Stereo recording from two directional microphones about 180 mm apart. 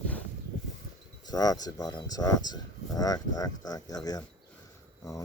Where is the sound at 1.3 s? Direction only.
20° left (ahead or behind).